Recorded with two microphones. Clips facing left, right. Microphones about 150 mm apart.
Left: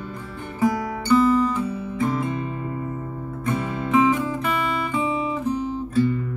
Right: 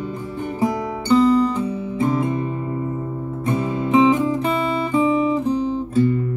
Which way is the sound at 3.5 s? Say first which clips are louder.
Right 3 dB; 20° right (ahead or behind).